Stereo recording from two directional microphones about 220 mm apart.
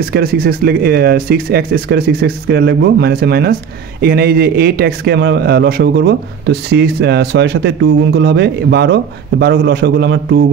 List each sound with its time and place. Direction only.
0.1 s a man's voice: 45° right (ahead or behind)